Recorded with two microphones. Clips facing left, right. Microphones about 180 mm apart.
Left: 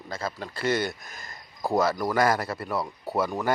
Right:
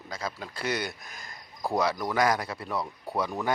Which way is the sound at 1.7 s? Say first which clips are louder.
Left 3 dB; centre (ahead or behind).